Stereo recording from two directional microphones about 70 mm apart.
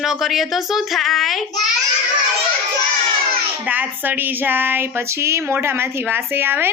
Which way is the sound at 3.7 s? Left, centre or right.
Right.